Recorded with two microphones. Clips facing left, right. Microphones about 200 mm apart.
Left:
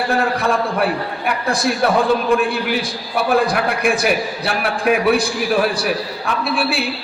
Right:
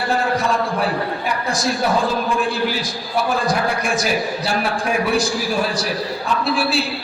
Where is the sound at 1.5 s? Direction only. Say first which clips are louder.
Left 3 dB; 60° left (ahead or behind).